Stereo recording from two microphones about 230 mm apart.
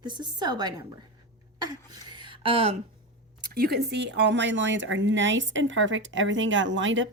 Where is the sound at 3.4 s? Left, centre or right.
Right.